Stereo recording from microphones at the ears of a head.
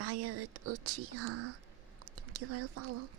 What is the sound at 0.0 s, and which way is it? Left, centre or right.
Speech, right.